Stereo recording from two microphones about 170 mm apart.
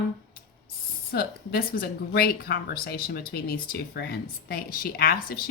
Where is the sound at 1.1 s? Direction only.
60° left (ahead or behind).